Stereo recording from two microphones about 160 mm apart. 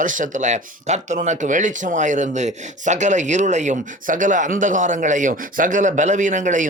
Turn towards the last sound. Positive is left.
turn(degrees=-55)  # may be behind; listen again after turning